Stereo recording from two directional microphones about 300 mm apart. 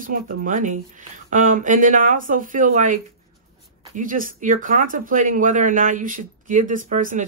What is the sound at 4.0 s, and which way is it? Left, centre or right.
Speech, right.